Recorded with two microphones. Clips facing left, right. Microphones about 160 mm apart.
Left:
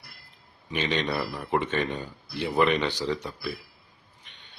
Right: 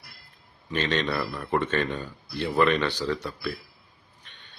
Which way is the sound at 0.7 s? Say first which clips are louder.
Right 1 dB; 15° left (ahead or behind).